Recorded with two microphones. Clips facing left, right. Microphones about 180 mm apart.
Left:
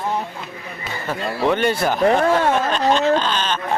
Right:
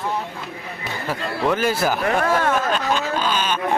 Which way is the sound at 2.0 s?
30° left (ahead or behind).